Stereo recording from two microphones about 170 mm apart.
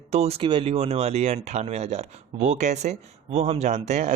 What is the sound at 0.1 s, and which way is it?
Speech, 35° right (ahead or behind).